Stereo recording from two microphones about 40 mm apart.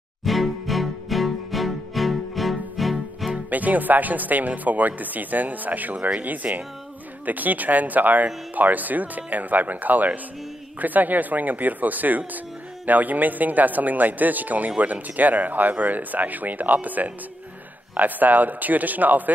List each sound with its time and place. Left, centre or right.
0.2 s music: centre
3.4 s speech: right